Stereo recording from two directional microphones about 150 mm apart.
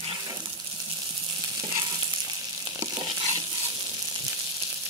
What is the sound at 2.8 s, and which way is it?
Stir, 25° right (ahead or behind).